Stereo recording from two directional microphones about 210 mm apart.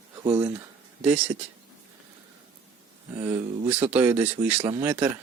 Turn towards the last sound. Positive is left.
turn(degrees=-10)  # may be behind; listen again after turning